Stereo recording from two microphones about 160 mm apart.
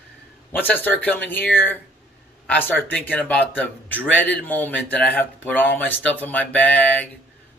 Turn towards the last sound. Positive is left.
turn(degrees=10)  # may be behind; listen again after turning